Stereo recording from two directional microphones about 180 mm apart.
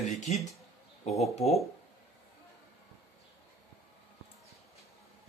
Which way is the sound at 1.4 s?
35° left (ahead or behind).